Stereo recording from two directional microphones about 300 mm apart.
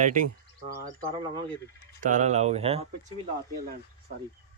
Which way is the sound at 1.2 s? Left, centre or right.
Centre.